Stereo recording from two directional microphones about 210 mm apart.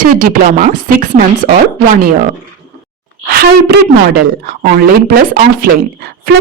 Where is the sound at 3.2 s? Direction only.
45° right (ahead or behind).